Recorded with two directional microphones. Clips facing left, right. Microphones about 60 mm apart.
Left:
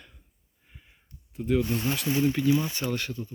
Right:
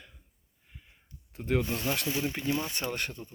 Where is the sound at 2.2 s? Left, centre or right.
Right.